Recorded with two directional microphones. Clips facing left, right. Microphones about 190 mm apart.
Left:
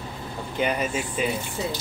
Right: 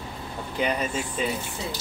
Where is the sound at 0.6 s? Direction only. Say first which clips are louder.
Left 1 dB; 5° left (ahead or behind).